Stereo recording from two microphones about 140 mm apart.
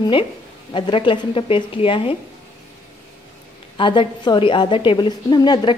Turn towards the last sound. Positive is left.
turn(degrees=30)  # may be behind; listen again after turning